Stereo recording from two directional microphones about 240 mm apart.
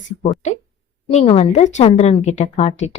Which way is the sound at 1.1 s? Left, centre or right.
Left.